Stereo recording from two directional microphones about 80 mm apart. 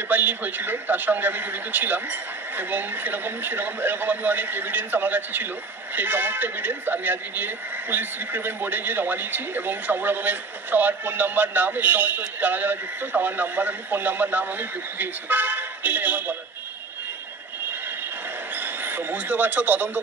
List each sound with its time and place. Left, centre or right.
0.1 s speech: right
18.5 s speech: right